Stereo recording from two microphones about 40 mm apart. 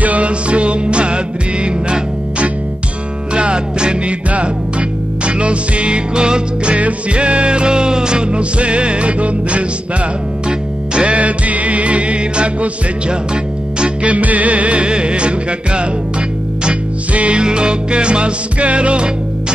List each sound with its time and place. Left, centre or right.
0.0 s music: right
3.3 s music: right
6.7 s music: right
11.0 s music: right
14.0 s music: right
17.1 s music: right
17.4 s music: right